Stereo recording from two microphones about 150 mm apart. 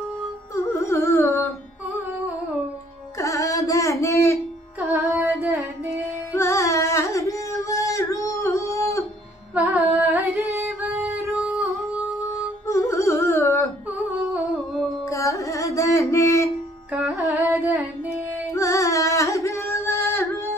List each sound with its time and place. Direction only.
0.6 s music: 20° left (ahead or behind)
3.2 s carnatic music: 20° left (ahead or behind)
4.7 s music: 15° right (ahead or behind)
6.3 s singing: 20° left (ahead or behind)
10.0 s singing: centre (ahead or behind)
11.0 s music: 15° right (ahead or behind)
12.6 s music: 20° left (ahead or behind)
14.3 s humming: centre (ahead or behind)
15.0 s music: 20° left (ahead or behind)
16.9 s music: 15° right (ahead or behind)
17.5 s carnatic music: 10° right (ahead or behind)
18.5 s singing: 20° left (ahead or behind)